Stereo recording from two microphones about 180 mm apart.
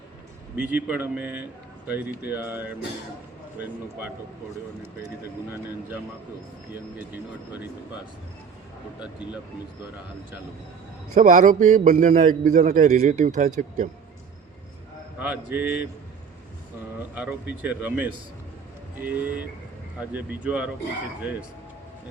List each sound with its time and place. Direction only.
0.5 s a man's voice: 10° right (ahead or behind)
11.1 s a man's voice: 45° right (ahead or behind)
15.2 s a man's voice: 10° right (ahead or behind)
17.2 s a man's voice: 5° right (ahead or behind)